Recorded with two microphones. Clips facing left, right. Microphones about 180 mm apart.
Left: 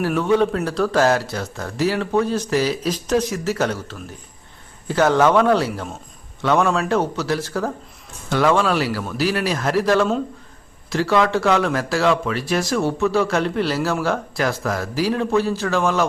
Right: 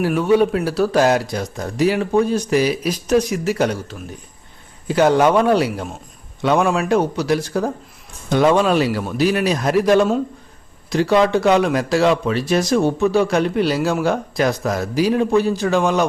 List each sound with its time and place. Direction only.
0.0 s speech: 10° right (ahead or behind)